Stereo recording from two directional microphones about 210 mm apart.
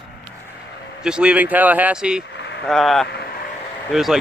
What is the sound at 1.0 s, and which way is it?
Speech, 5° right (ahead or behind).